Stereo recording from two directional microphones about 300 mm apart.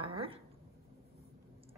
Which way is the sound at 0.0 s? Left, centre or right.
Centre.